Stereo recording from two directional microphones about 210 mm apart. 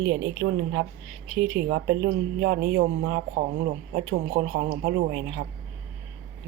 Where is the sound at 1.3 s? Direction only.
45° right (ahead or behind).